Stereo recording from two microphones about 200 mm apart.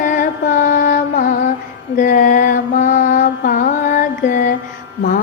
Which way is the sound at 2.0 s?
45° left (ahead or behind).